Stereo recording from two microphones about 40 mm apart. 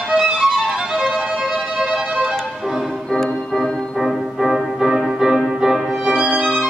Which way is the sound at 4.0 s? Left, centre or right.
Centre.